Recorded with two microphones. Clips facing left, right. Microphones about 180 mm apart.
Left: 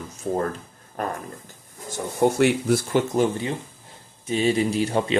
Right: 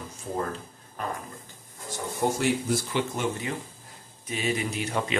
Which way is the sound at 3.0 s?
35° left (ahead or behind).